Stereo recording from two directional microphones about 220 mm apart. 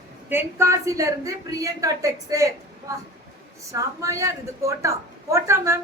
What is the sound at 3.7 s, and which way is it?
Speech, 15° right (ahead or behind).